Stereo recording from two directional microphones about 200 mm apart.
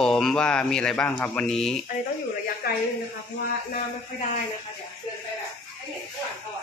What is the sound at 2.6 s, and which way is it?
Speech, 50° left (ahead or behind).